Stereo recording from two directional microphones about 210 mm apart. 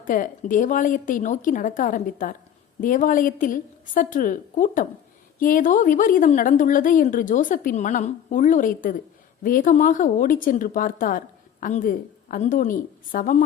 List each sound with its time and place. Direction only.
0.0 s a woman's voice: 40° left (ahead or behind)